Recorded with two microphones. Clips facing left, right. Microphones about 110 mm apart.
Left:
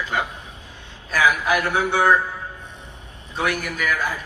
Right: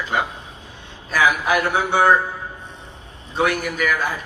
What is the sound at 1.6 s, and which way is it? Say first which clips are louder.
Speech: right 3 dB; 20° right (ahead or behind).